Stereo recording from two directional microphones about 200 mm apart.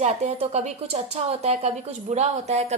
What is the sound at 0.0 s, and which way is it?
Speech, 35° right (ahead or behind).